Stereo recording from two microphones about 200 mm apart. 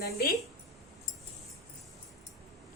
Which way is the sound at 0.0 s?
50° left (ahead or behind).